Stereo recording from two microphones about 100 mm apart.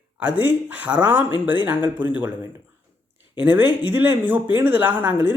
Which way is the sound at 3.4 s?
20° right (ahead or behind).